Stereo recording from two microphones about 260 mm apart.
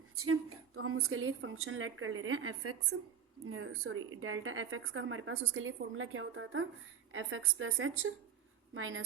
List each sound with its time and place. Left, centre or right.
0.2 s a woman's voice: right